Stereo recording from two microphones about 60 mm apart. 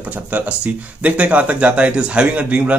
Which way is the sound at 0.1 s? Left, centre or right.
Right.